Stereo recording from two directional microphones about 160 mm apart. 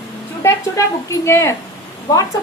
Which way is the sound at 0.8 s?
20° left (ahead or behind).